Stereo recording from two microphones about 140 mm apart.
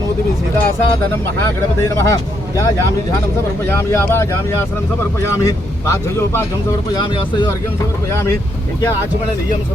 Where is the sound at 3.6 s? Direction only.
15° left (ahead or behind).